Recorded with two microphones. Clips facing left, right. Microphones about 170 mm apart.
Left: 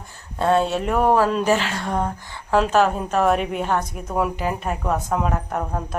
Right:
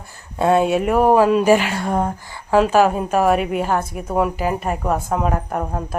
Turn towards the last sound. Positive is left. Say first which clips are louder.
# right 2 dB
turn(degrees=-10)  # may be behind; listen again after turning